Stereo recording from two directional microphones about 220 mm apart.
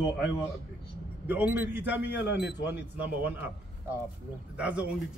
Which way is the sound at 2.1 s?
50° left (ahead or behind).